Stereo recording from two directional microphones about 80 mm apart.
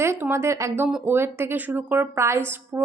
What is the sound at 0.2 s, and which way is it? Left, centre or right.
A woman's voice, right.